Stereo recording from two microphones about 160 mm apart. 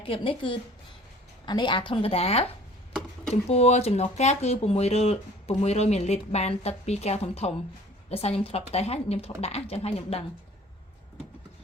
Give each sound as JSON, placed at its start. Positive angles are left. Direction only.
{"t": 0.0, "sound": "speech", "side_deg": 35}
{"t": 3.5, "sound": "speech", "side_deg": 40}